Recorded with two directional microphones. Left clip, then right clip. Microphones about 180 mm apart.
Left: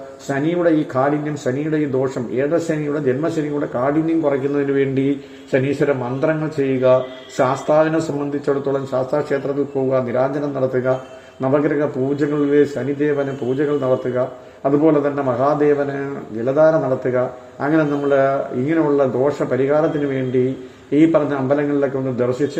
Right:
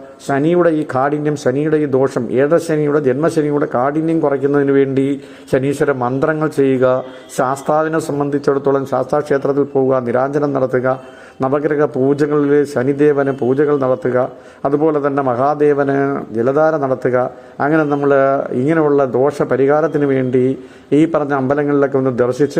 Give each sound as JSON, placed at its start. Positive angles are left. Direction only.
{"t": 0.3, "sound": "a man's voice", "side_deg": -15}